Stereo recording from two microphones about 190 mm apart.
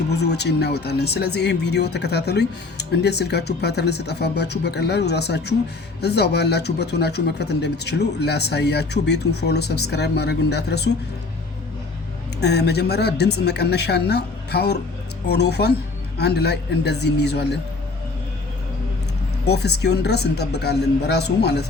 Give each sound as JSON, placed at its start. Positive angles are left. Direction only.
{"t": 0.1, "sound": "speech", "side_deg": 60}
{"t": 12.4, "sound": "speech", "side_deg": 60}
{"t": 19.5, "sound": "speech", "side_deg": 60}